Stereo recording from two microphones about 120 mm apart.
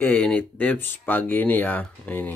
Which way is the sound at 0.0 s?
10° left (ahead or behind).